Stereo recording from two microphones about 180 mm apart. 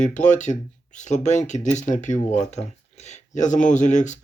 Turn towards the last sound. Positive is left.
turn(degrees=40)  # may be behind; listen again after turning